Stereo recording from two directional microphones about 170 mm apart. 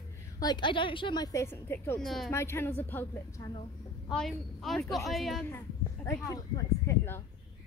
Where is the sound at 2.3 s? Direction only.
15° left (ahead or behind).